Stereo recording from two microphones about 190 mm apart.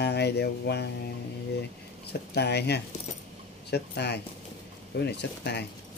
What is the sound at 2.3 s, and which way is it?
Speech, 60° left (ahead or behind).